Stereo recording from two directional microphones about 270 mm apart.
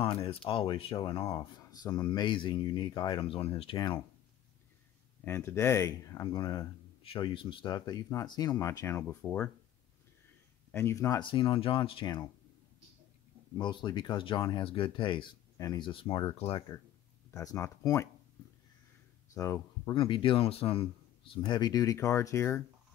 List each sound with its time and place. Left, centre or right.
0.0 s speech: left
5.2 s speech: centre
10.7 s speech: centre
13.6 s speech: centre
19.3 s speech: centre